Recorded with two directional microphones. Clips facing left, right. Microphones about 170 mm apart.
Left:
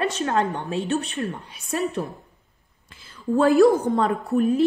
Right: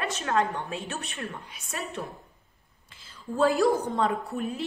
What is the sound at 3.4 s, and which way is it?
A woman's voice, 55° left (ahead or behind).